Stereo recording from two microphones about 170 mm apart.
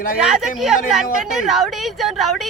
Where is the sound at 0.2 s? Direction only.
5° right (ahead or behind).